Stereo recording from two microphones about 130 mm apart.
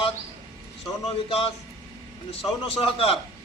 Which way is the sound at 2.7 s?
45° left (ahead or behind).